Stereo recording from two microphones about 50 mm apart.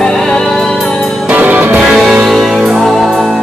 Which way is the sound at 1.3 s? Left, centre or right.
Right.